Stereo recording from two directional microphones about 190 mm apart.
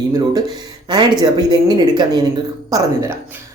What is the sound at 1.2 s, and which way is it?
A woman's voice, 20° right (ahead or behind).